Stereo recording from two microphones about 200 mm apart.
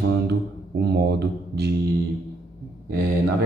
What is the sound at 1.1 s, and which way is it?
Mantra, 55° right (ahead or behind).